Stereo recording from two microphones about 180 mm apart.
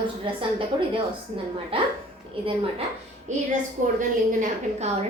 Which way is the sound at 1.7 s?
30° right (ahead or behind).